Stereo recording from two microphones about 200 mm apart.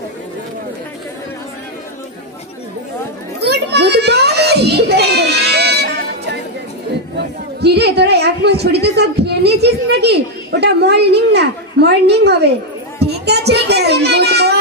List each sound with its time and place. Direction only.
3.3 s children playing: 55° right (ahead or behind)
7.2 s a woman's voice: 55° right (ahead or behind)